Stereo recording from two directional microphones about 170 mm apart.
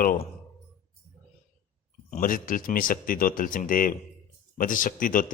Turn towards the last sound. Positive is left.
turn(degrees=55)  # may be behind; listen again after turning